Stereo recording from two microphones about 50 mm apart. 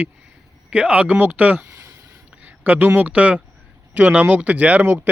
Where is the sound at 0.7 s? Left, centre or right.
Right.